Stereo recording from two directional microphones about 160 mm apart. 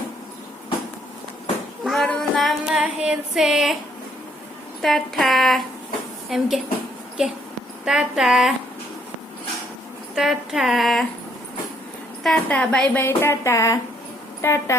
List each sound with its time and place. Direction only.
1.8 s child singing: centre (ahead or behind)
4.8 s speech: centre (ahead or behind)
10.2 s speech: centre (ahead or behind)
12.2 s speech: 5° left (ahead or behind)